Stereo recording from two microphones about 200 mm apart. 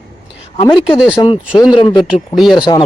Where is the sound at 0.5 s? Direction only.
25° left (ahead or behind).